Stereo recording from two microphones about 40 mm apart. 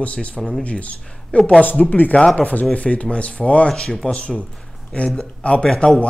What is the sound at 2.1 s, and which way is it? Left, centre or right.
A man's voice, left.